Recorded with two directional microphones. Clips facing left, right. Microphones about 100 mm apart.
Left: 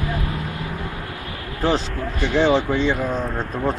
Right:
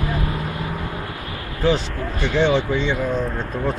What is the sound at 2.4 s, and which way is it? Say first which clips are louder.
Speech: left 1 dB; 35° left (ahead or behind).